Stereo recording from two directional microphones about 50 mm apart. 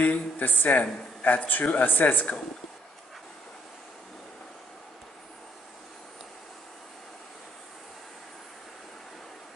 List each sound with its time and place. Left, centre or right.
0.0 s speech: left